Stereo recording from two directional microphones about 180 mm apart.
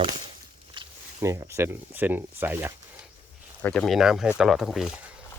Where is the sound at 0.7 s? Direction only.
20° right (ahead or behind).